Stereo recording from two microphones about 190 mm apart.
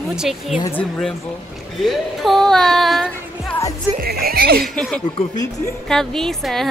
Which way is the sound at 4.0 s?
55° right (ahead or behind).